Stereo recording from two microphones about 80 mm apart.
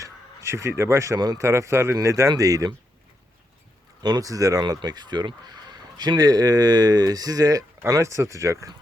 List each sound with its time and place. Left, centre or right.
0.0 s crow: right
1.4 s speech: right
2.4 s speech: right
4.0 s speech: right
4.6 s speech: right